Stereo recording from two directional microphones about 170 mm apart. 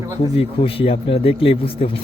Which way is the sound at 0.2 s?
35° left (ahead or behind).